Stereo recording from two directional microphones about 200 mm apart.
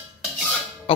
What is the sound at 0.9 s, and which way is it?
Music, 25° left (ahead or behind).